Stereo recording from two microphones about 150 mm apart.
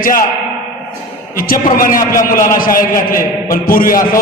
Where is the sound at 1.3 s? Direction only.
70° left (ahead or behind).